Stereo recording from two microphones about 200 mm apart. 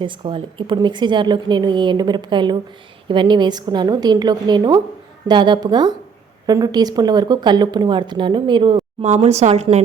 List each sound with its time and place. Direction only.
0.0 s speech: 25° right (ahead or behind)